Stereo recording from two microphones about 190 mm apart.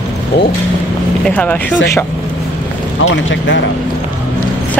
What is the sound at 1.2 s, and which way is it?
Speech, 10° left (ahead or behind).